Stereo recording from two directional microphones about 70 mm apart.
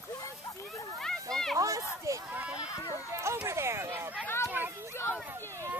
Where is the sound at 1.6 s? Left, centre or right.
Right.